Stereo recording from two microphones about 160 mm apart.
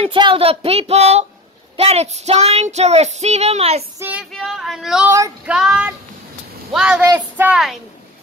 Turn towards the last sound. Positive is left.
turn(degrees=-5)  # may be behind; listen again after turning